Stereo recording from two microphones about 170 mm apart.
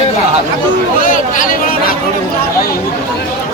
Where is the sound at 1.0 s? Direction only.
50° left (ahead or behind).